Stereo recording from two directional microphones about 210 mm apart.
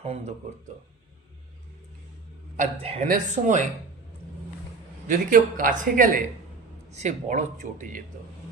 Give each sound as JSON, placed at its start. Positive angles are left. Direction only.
{"t": 0.0, "sound": "speech", "side_deg": -30}
{"t": 2.6, "sound": "a man's voice", "side_deg": -30}
{"t": 5.0, "sound": "speech", "side_deg": -40}